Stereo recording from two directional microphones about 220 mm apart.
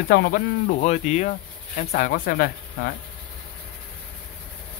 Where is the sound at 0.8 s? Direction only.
30° left (ahead or behind).